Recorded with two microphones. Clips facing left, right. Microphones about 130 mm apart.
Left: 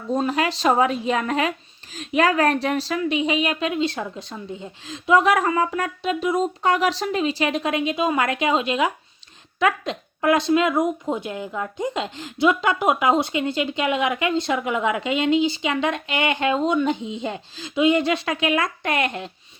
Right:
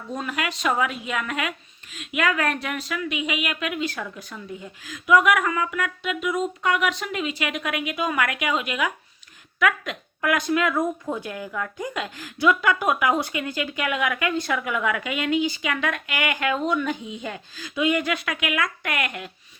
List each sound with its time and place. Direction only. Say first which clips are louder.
0.1 s speech: left 7 dB; 30° left (ahead or behind)